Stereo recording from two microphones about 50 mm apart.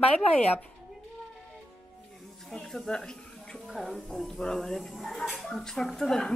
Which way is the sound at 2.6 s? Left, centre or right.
Centre.